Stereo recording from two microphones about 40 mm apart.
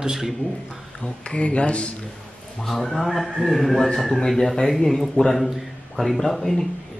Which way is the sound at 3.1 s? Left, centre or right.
Centre.